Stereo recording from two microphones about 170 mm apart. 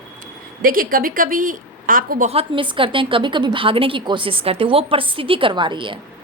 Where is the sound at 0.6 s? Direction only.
55° right (ahead or behind).